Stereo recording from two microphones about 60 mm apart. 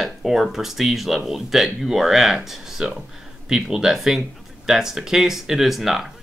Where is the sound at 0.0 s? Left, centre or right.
Centre.